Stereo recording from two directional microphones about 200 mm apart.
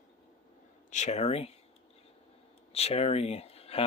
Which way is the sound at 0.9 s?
35° left (ahead or behind).